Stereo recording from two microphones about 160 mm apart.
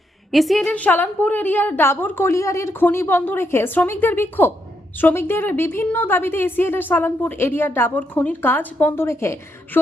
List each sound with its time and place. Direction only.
0.3 s a woman's voice: centre (ahead or behind); by 9.8 s 15° left (ahead or behind)